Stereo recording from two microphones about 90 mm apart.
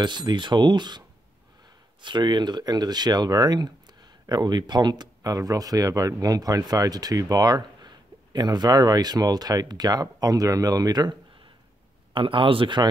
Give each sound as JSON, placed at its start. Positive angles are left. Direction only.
{"t": 0.0, "sound": "speech", "side_deg": -55}
{"t": 12.1, "sound": "speech", "side_deg": -70}